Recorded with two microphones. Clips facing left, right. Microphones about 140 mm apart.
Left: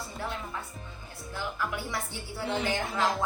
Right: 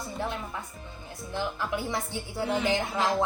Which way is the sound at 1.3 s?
20° right (ahead or behind).